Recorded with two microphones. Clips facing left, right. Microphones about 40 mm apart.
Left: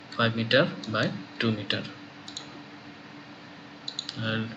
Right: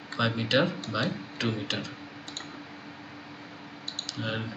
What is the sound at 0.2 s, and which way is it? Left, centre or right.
Speech, centre.